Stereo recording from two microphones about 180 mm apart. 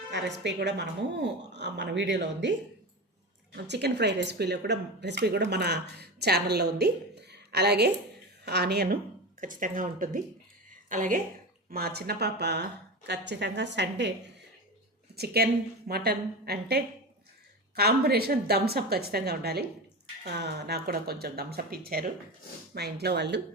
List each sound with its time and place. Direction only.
0.1 s speech: 75° right (ahead or behind)
3.5 s a woman's voice: 70° right (ahead or behind)
9.4 s speech: 45° right (ahead or behind)
10.7 s a sound: 45° right (ahead or behind)
11.7 s a woman's voice: 60° right (ahead or behind)
15.1 s a woman's voice: 60° right (ahead or behind)